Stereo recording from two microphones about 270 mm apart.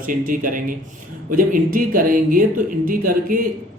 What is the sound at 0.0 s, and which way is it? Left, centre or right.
A man's voice, right.